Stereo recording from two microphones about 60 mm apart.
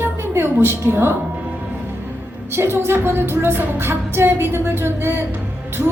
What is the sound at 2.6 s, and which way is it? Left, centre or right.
Music, right.